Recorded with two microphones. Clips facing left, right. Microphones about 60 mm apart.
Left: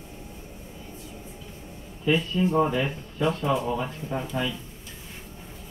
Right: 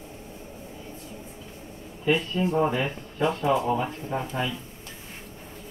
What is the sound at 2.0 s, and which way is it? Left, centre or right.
Speech, right.